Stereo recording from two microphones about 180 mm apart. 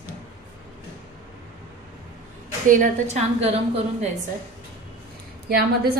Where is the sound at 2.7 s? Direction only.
40° right (ahead or behind).